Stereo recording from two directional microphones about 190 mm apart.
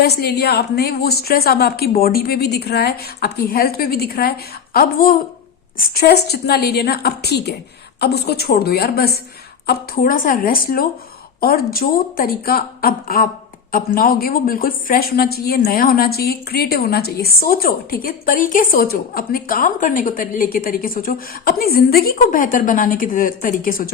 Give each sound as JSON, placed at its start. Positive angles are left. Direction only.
{"t": 0.0, "sound": "a woman's voice", "side_deg": 60}